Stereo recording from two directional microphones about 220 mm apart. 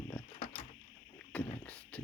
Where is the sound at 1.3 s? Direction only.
5° left (ahead or behind).